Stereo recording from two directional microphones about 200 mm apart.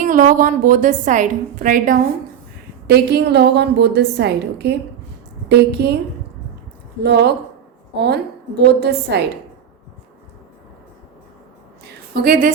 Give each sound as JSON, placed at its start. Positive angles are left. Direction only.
{"t": 0.0, "sound": "a woman's voice", "side_deg": -45}
{"t": 2.8, "sound": "a woman's voice", "side_deg": -55}
{"t": 7.0, "sound": "a woman's voice", "side_deg": -55}
{"t": 12.1, "sound": "a woman's voice", "side_deg": -50}